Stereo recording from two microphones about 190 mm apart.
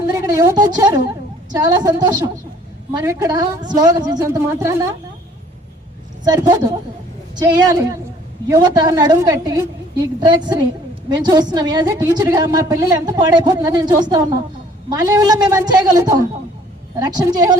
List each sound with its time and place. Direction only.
0.2 s a woman's voice: 15° right (ahead or behind)
6.2 s a woman's voice: 20° right (ahead or behind)